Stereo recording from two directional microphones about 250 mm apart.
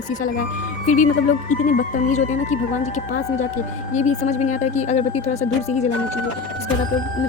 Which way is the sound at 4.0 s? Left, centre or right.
Left.